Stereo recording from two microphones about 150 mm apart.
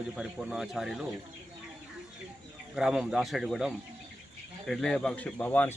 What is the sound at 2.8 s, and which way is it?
A man's voice, 5° right (ahead or behind).